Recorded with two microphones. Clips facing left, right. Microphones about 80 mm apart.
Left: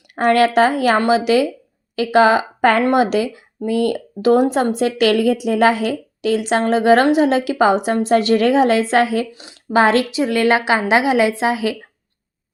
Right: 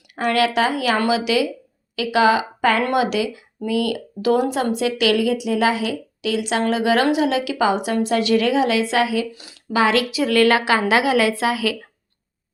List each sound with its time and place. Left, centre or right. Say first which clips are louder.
0.2 s a woman's voice: left 5 dB; left
9.3 s speech: left 2 dB; left
9.7 s a woman's voice: left 4 dB; left